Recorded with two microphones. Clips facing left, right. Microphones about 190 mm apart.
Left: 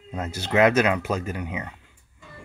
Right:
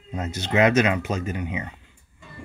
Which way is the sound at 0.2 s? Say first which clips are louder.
Left 1 dB; 55° left (ahead or behind).